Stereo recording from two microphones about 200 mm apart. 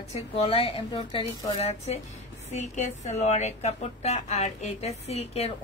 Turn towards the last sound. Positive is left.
turn(degrees=30)  # may be behind; listen again after turning